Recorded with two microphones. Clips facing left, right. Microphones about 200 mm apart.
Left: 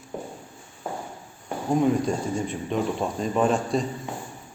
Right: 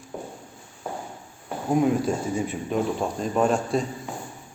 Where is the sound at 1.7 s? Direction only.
5° right (ahead or behind).